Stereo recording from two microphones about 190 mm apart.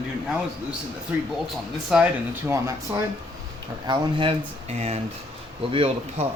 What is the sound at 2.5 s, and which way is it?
Speech, 15° right (ahead or behind).